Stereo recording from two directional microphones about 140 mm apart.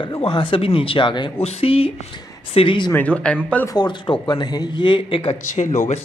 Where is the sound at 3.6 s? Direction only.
30° left (ahead or behind).